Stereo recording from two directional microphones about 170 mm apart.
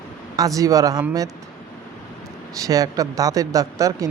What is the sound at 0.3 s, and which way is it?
Speech, 20° right (ahead or behind).